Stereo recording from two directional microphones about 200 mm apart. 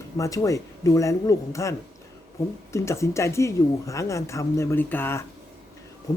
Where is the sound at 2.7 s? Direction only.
15° left (ahead or behind).